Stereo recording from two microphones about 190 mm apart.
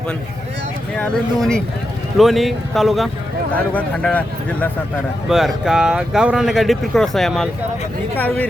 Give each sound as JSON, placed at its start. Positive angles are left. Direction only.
{"t": 0.9, "sound": "speech", "side_deg": 5}
{"t": 5.3, "sound": "speech", "side_deg": 0}